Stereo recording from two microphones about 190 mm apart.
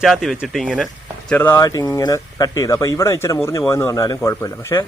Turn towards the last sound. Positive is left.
turn(degrees=15)  # may be behind; listen again after turning